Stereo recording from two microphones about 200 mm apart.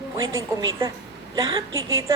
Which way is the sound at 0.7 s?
20° right (ahead or behind).